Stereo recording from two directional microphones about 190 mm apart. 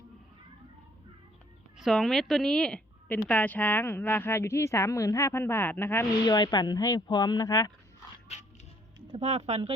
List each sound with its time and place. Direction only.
1.8 s a woman's voice: centre (ahead or behind); by 7.7 s 15° left (ahead or behind)
9.1 s speech: 35° right (ahead or behind)